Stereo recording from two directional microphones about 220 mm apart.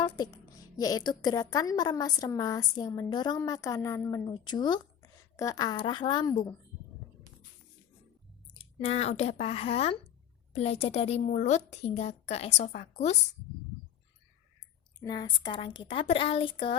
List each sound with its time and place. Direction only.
0.8 s a woman's voice: 15° left (ahead or behind)
8.5 s a woman's voice: 25° left (ahead or behind)
15.0 s a woman's voice: 20° left (ahead or behind)